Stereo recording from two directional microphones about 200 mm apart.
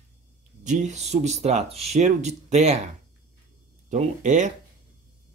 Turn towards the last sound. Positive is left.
turn(degrees=-35)  # may be behind; listen again after turning